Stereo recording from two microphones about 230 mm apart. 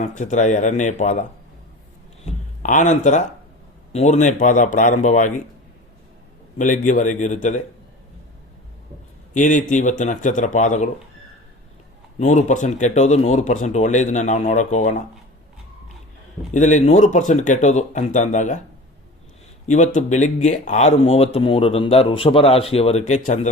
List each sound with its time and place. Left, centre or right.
0.0 s speech: left
2.2 s speech: left
6.6 s speech: left
9.3 s speech: left
12.2 s speech: left
16.5 s speech: left
19.6 s speech: left